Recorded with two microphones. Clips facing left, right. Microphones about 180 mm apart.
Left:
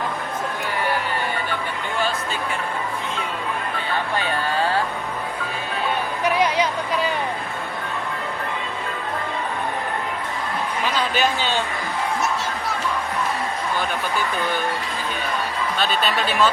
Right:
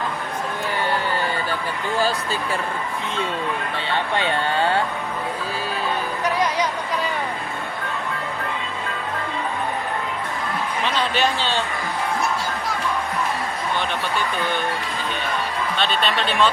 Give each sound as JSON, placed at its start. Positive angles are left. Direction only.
{"t": 4.1, "sound": "a sound", "side_deg": -25}
{"t": 10.8, "sound": "a man's voice", "side_deg": 5}
{"t": 15.8, "sound": "speech", "side_deg": 5}